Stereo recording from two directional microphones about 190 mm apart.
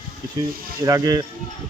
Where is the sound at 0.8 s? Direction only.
15° right (ahead or behind).